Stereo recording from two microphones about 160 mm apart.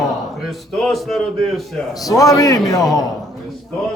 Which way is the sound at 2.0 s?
20° left (ahead or behind).